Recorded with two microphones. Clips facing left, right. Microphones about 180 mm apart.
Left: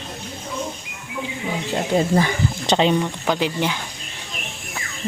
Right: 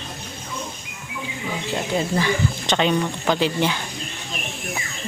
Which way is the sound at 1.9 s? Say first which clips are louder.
Left 3 dB; 35° left (ahead or behind).